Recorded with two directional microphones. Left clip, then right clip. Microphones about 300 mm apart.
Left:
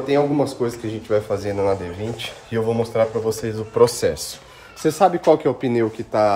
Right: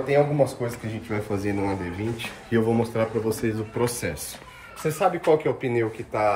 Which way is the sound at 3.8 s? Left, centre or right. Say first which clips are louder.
Left 12 dB; centre.